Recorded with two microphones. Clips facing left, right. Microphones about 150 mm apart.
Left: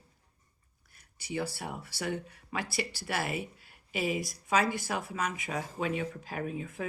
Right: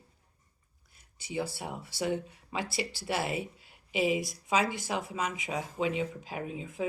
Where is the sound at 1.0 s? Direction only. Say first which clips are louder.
Even; 20° right (ahead or behind).